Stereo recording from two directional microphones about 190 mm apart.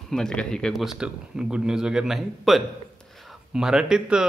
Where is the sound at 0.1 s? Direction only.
5° left (ahead or behind).